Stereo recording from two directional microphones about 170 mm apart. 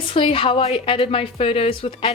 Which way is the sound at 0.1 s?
30° left (ahead or behind).